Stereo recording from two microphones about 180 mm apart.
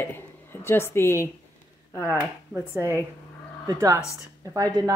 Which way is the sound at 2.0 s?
15° right (ahead or behind).